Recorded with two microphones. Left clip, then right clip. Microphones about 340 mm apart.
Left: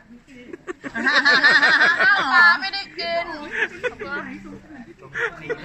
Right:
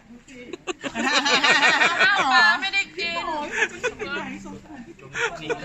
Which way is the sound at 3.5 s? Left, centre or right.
Centre.